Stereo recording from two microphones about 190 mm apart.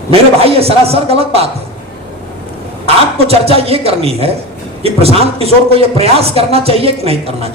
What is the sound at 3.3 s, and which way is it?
Speech, 30° right (ahead or behind).